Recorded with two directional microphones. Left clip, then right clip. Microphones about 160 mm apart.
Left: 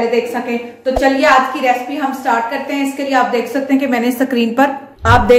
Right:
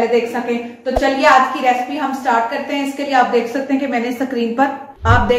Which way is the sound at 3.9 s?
60° left (ahead or behind).